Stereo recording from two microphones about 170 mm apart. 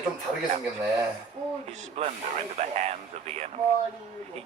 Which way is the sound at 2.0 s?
40° right (ahead or behind).